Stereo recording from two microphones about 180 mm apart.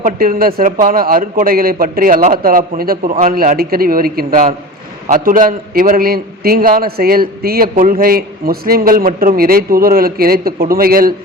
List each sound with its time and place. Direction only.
0.0 s a man's voice: 50° right (ahead or behind)